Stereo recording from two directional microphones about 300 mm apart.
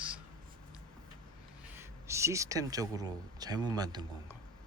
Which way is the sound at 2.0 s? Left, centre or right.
Centre.